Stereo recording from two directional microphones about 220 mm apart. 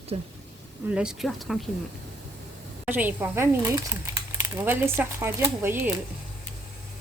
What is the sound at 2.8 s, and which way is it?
Speech, 10° right (ahead or behind).